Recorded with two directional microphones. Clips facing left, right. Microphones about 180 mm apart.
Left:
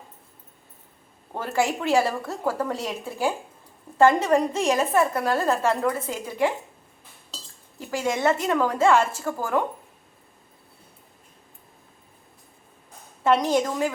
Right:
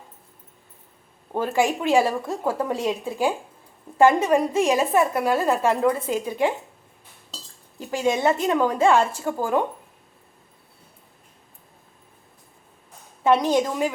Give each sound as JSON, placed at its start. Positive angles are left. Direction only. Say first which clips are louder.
{"t": 1.3, "sound": "a woman's voice", "louder": "right 3 dB", "side_deg": -15}
{"t": 7.9, "sound": "a woman's voice", "louder": "right 2 dB", "side_deg": -20}
{"t": 13.2, "sound": "a woman's voice", "louder": "right 2 dB", "side_deg": -15}